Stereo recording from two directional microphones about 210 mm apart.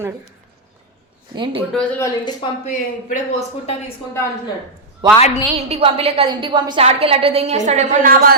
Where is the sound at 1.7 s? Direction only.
5° left (ahead or behind).